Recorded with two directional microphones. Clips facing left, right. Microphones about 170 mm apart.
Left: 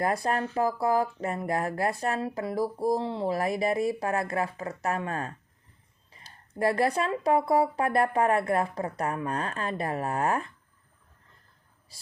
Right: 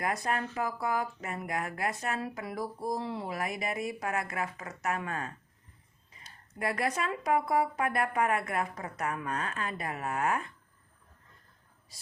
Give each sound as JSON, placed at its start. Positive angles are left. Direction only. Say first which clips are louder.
{"t": 0.0, "sound": "speech", "louder": "left 5 dB", "side_deg": 30}